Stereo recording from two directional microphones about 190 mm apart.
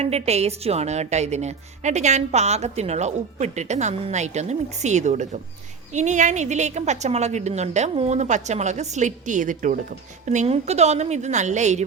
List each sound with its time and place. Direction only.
0.0 s a woman's voice: 35° right (ahead or behind)